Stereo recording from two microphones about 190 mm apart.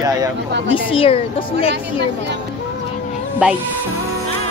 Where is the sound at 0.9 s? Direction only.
30° left (ahead or behind).